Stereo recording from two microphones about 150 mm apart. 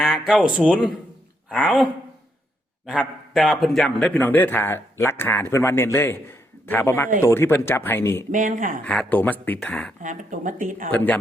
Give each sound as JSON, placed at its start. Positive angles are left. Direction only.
{"t": 0.0, "sound": "a man's voice", "side_deg": 0}
{"t": 8.3, "sound": "speech", "side_deg": -60}
{"t": 8.8, "sound": "speech", "side_deg": 10}
{"t": 10.0, "sound": "speech", "side_deg": -55}
{"t": 10.9, "sound": "speech", "side_deg": 10}